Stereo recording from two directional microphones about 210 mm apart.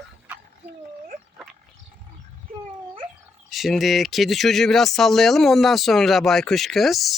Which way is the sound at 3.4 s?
Centre (ahead or behind).